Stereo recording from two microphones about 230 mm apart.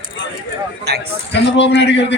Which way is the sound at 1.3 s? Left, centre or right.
Left.